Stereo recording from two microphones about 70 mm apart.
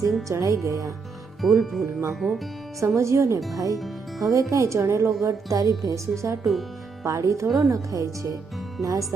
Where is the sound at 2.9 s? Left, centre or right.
Right.